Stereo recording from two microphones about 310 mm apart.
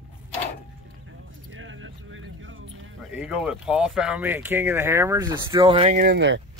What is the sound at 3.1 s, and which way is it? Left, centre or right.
Speech, centre.